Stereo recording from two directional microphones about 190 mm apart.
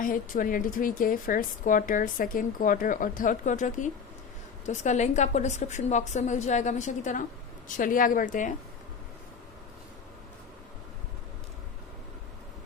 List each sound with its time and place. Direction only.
0.0 s a woman's voice: 45° left (ahead or behind)